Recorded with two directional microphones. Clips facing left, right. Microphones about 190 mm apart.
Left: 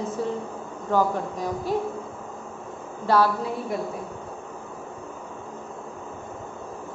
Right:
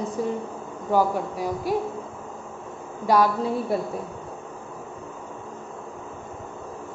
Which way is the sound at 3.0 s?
15° right (ahead or behind).